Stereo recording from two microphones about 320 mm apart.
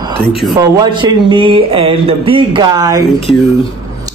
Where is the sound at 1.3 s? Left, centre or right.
Centre.